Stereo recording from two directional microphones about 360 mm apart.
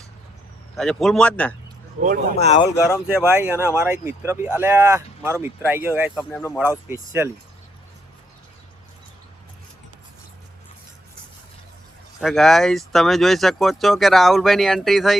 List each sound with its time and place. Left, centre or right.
0.8 s speech: centre
3.2 s speech: centre
12.2 s speech: centre